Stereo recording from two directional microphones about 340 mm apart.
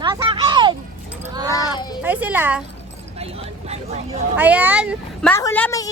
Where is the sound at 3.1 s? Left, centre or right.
Centre.